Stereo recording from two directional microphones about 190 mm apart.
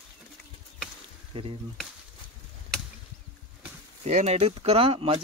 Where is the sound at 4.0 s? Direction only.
35° right (ahead or behind).